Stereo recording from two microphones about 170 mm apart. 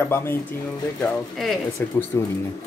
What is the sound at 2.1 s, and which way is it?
Speech, 20° left (ahead or behind).